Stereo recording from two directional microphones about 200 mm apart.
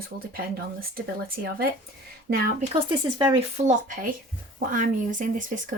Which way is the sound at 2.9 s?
25° right (ahead or behind).